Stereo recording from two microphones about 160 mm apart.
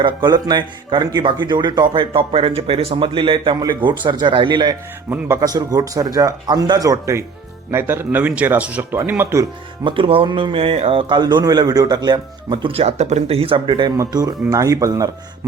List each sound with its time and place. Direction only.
0.0 s a man's voice: 25° right (ahead or behind)
9.8 s a man's voice: 30° right (ahead or behind)